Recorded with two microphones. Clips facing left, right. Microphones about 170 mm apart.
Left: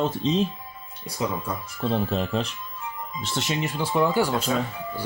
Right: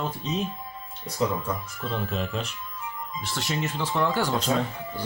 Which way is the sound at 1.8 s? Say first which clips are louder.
Left 6 dB; 35° left (ahead or behind).